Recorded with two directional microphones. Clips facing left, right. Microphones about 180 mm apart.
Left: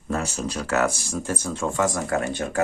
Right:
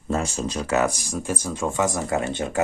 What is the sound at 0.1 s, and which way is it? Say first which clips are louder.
Speech: right 2 dB; 20° right (ahead or behind).